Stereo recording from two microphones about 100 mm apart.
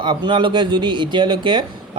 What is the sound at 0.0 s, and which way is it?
Speech, 50° right (ahead or behind).